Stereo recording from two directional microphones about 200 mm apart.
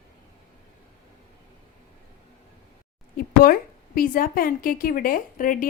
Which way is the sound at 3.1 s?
45° left (ahead or behind).